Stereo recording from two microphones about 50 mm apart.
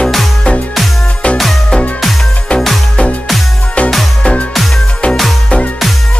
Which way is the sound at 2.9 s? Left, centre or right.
Left.